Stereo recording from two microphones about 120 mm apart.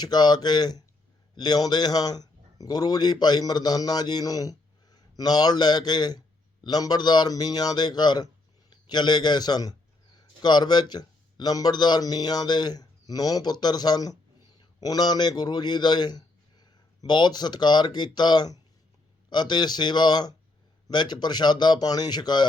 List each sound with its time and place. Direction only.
0.0 s a man's voice: 35° left (ahead or behind)